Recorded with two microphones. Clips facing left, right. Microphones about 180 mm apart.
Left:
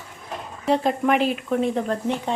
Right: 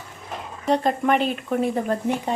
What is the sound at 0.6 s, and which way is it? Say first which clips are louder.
A woman's voice: even; centre (ahead or behind).